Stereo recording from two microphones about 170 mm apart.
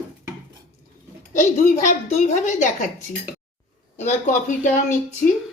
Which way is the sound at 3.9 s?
45° left (ahead or behind).